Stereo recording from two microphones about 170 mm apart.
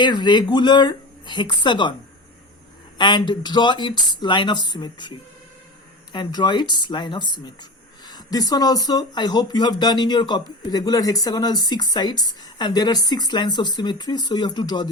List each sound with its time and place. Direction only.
0.0 s speech: 25° left (ahead or behind)
3.0 s speech: 25° left (ahead or behind)
8.0 s a sound: 25° left (ahead or behind)
8.9 s speech: 25° left (ahead or behind)